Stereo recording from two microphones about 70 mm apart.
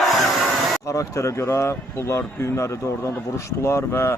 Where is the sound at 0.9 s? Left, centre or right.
Left.